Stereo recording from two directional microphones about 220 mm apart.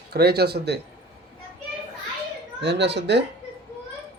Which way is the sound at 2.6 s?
50° right (ahead or behind).